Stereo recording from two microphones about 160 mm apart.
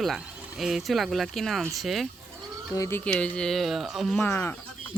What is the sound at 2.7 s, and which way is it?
Speech, 15° left (ahead or behind).